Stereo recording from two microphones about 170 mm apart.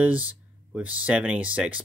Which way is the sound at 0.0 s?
10° right (ahead or behind).